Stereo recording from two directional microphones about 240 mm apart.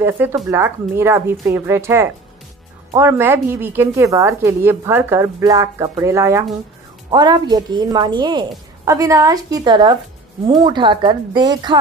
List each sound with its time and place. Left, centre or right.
0.0 s a woman's voice: centre